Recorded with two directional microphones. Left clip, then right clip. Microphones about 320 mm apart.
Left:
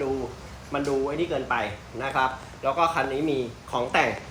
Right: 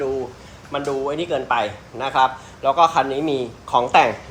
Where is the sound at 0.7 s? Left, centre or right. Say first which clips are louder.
Right 3 dB; centre.